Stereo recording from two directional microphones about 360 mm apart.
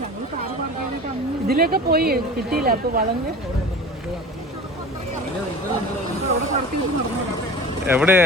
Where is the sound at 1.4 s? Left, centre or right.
Right.